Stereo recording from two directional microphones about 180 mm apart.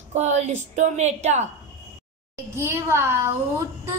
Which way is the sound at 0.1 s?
40° right (ahead or behind).